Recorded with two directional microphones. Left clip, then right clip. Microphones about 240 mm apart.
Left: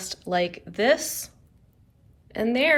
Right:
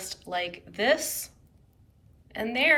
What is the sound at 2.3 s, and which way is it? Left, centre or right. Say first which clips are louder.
Speech: left 2 dB; centre.